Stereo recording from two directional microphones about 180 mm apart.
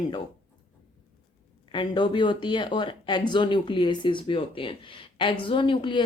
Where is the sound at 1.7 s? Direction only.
25° left (ahead or behind).